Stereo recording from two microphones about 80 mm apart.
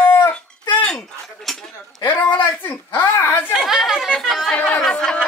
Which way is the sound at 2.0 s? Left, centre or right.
Left.